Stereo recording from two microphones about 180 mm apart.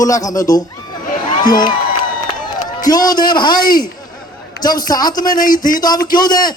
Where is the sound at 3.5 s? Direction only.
50° left (ahead or behind).